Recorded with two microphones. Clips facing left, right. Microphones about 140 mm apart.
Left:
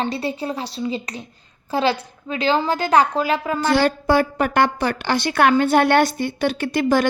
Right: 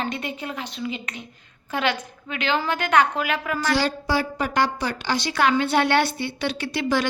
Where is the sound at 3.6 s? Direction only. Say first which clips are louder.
Left 5 dB; 55° left (ahead or behind).